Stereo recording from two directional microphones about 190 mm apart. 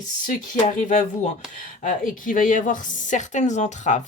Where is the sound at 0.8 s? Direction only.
40° left (ahead or behind).